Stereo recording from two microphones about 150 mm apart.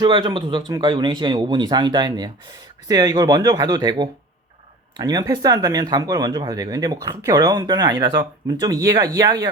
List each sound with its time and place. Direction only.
0.0 s speech: 30° right (ahead or behind)